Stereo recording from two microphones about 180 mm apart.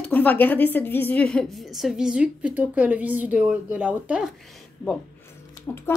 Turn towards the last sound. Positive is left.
turn(degrees=15)  # may be behind; listen again after turning